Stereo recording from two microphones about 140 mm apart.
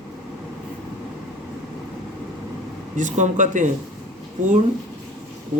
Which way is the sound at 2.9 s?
65° right (ahead or behind).